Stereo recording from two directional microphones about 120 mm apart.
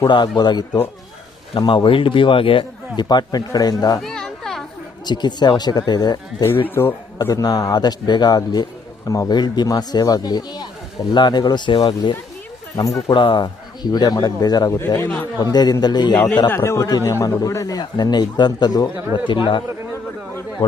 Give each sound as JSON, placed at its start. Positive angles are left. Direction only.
{"t": 0.1, "sound": "a man's voice", "side_deg": 35}
{"t": 4.0, "sound": "a sound", "side_deg": 5}
{"t": 5.0, "sound": "a man's voice", "side_deg": 35}
{"t": 6.7, "sound": "speech", "side_deg": 15}
{"t": 7.2, "sound": "a man's voice", "side_deg": 30}
{"t": 12.7, "sound": "a man's voice", "side_deg": 30}
{"t": 14.8, "sound": "speech", "side_deg": 20}
{"t": 15.5, "sound": "a man's voice", "side_deg": 35}
{"t": 16.1, "sound": "speech", "side_deg": 10}
{"t": 16.5, "sound": "a man's voice", "side_deg": 25}